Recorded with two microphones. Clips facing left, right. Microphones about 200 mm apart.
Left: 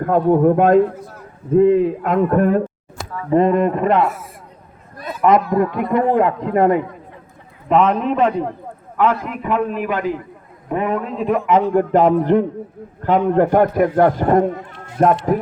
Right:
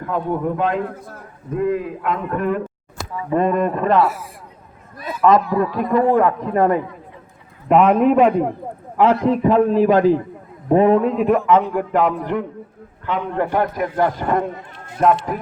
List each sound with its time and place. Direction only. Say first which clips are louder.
0.0 s a man's voice: left 8 dB; 50° left (ahead or behind)
1.5 s a man's voice: left 8 dB; 25° left (ahead or behind)
2.0 s a man's voice: left 3 dB; 45° left (ahead or behind)
3.3 s a man's voice: left 3 dB; 25° left (ahead or behind)
5.2 s a man's voice: left 1 dB; 20° left (ahead or behind)
7.7 s a man's voice: right 3 dB; 10° right (ahead or behind)
9.0 s a man's voice: right 4 dB; 30° right (ahead or behind)
11.2 s a man's voice: right 2 dB; 5° right (ahead or behind)
11.6 s a man's voice: left 5 dB; 35° left (ahead or behind)
13.0 s a man's voice: left 7 dB; 45° left (ahead or behind)